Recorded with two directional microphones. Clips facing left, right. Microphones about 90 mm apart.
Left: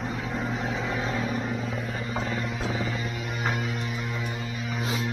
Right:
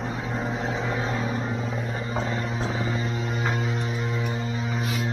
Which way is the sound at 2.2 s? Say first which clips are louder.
Right 2 dB; 30° right (ahead or behind).